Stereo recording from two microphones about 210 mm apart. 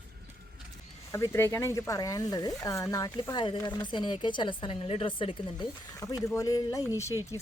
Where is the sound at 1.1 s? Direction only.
15° left (ahead or behind).